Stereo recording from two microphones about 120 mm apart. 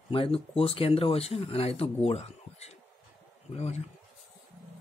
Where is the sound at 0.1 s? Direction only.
50° left (ahead or behind).